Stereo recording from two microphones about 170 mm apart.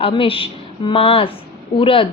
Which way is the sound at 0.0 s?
30° left (ahead or behind).